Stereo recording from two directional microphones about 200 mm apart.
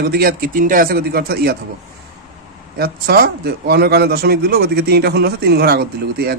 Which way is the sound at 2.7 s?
50° right (ahead or behind).